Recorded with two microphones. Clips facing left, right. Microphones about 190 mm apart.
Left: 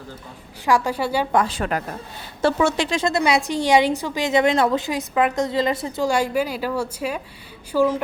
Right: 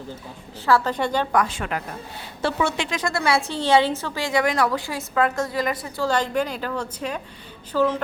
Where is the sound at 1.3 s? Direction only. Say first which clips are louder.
Left 2 dB; 30° left (ahead or behind).